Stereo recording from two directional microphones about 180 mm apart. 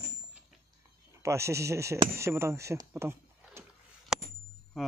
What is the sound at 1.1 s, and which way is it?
Speech, 15° right (ahead or behind).